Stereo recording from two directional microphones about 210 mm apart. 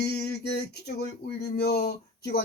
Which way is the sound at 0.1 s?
50° left (ahead or behind).